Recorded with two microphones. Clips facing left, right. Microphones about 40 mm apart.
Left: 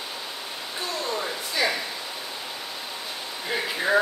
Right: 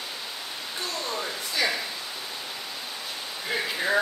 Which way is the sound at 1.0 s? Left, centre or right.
Centre.